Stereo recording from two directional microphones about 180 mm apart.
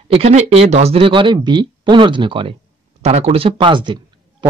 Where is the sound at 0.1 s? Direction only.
35° right (ahead or behind).